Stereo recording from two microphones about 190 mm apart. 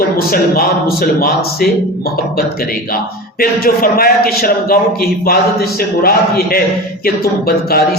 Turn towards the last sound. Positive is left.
turn(degrees=55)  # may be behind; listen again after turning